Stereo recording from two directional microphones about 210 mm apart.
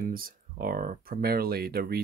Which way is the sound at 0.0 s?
45° right (ahead or behind).